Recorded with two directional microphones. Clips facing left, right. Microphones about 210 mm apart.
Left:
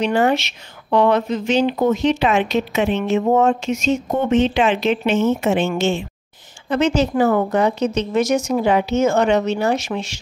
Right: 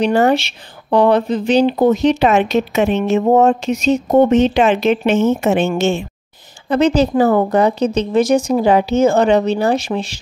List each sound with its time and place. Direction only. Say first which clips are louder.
0.0 s a woman's voice: right 4 dB; 35° right (ahead or behind)
6.7 s speech: right 4 dB; 35° right (ahead or behind)